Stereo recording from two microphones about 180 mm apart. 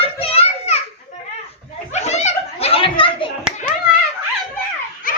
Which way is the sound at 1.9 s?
40° left (ahead or behind).